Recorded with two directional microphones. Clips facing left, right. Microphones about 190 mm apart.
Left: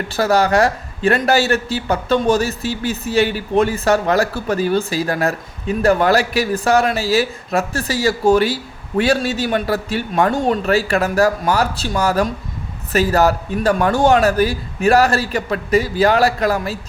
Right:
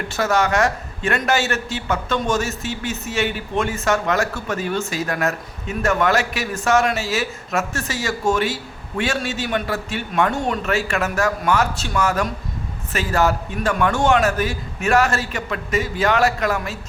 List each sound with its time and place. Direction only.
0.1 s a man's voice: 35° left (ahead or behind)